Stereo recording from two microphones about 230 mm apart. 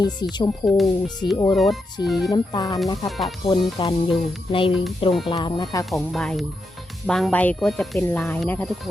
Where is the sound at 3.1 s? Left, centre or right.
Centre.